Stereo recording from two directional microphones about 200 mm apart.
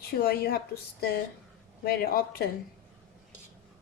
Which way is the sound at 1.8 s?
50° left (ahead or behind).